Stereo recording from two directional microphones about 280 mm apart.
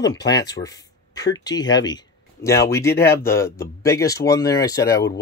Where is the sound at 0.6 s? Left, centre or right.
Centre.